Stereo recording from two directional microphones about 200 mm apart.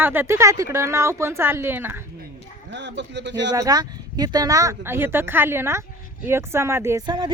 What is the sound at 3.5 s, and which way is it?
Speech, 20° right (ahead or behind).